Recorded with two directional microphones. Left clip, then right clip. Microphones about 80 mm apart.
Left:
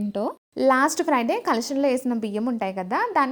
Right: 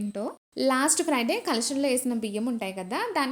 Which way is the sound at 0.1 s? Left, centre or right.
Left.